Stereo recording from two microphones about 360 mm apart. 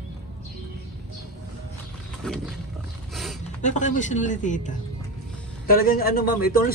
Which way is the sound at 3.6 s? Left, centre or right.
Centre.